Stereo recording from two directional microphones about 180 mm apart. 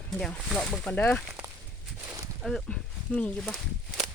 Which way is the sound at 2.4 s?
Centre (ahead or behind).